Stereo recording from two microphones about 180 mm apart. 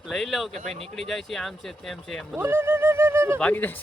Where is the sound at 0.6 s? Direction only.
35° right (ahead or behind).